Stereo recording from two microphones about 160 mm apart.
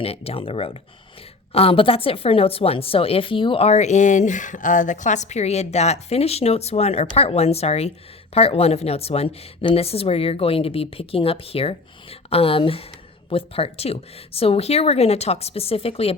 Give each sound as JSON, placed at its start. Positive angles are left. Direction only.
{"t": 0.0, "sound": "a woman's voice", "side_deg": 40}